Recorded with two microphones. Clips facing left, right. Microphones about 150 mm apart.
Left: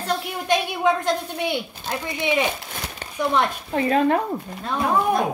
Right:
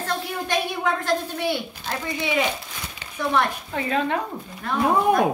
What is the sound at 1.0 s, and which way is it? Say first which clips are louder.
A woman's voice: even; 20° left (ahead or behind).